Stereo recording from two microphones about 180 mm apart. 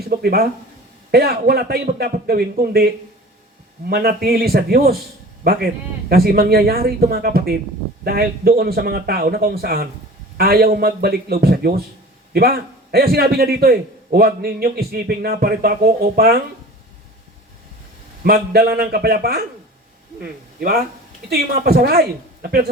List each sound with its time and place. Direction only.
0.1 s a man's voice: 60° right (ahead or behind)
18.2 s a man's voice: 55° right (ahead or behind)
21.2 s a man's voice: 60° right (ahead or behind)